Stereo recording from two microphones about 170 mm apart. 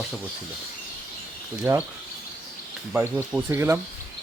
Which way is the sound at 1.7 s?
15° right (ahead or behind).